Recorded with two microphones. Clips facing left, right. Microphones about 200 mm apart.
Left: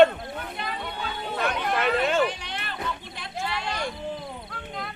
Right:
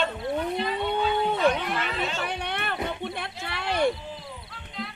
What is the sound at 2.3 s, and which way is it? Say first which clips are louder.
Music: right 5 dB; 60° right (ahead or behind).